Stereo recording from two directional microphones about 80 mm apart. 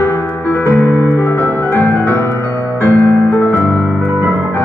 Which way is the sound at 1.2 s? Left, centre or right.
Left.